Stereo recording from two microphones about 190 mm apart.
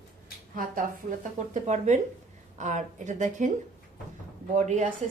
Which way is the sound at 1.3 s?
40° right (ahead or behind).